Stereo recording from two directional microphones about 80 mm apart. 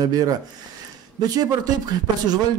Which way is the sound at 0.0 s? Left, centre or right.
Right.